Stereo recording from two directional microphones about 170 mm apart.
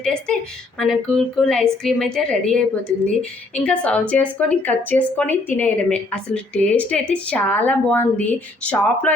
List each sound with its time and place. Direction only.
0.0 s a woman's voice: 5° left (ahead or behind)